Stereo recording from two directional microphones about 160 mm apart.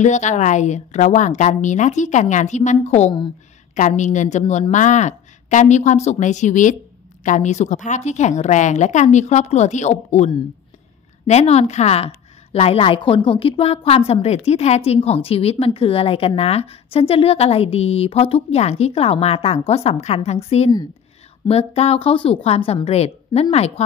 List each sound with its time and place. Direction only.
0.0 s a woman's voice: 50° left (ahead or behind)